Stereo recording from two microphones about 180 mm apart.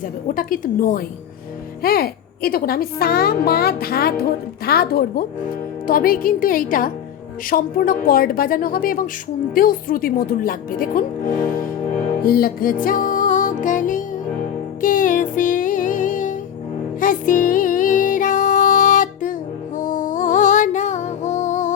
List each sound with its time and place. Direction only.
0.3 s a woman's voice: 50° left (ahead or behind)
12.2 s music: 55° left (ahead or behind)